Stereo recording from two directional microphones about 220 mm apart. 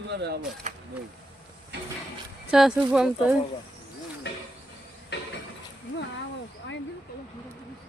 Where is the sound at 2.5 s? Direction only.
5° right (ahead or behind).